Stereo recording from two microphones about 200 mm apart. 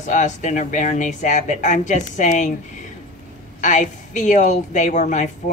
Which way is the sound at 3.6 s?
40° left (ahead or behind).